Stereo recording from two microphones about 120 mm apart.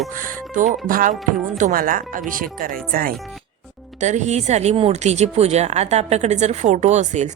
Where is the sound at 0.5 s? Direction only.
90° right.